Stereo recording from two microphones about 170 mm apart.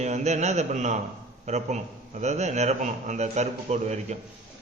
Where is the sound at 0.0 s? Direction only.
40° right (ahead or behind).